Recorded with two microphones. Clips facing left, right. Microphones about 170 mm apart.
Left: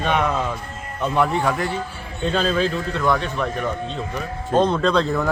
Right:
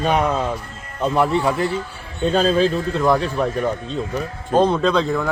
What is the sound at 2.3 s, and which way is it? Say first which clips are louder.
A man's voice: right 4 dB; 35° right (ahead or behind).